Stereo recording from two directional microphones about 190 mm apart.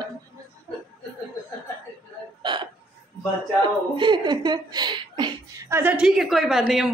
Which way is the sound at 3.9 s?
25° right (ahead or behind).